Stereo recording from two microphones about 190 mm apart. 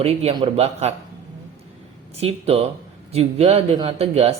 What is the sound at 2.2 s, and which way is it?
A man's voice, 30° right (ahead or behind).